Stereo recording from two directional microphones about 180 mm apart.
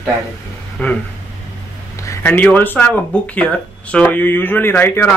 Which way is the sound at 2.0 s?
10° left (ahead or behind).